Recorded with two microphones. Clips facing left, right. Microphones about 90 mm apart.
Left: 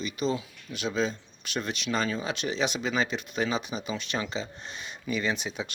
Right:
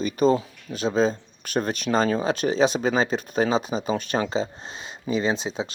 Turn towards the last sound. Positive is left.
turn(degrees=-30)  # may be behind; listen again after turning